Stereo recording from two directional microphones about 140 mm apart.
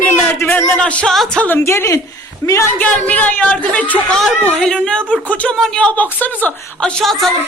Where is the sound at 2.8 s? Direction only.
10° left (ahead or behind).